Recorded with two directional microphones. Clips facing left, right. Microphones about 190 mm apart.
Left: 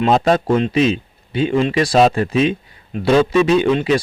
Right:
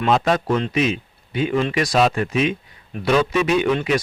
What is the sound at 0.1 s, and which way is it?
Speech, 30° left (ahead or behind).